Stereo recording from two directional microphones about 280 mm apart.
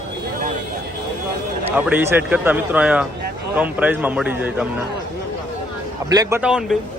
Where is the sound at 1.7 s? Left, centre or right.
Centre.